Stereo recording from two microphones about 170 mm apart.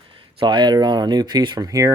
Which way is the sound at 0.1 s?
30° right (ahead or behind).